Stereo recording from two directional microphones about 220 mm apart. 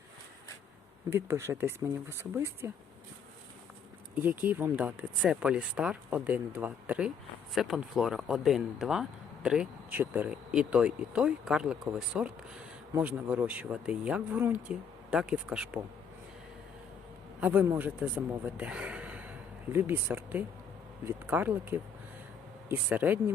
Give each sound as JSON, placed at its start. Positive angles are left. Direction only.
{"t": 1.1, "sound": "speech", "side_deg": -10}
{"t": 4.1, "sound": "speech", "side_deg": -10}
{"t": 17.4, "sound": "speech", "side_deg": -5}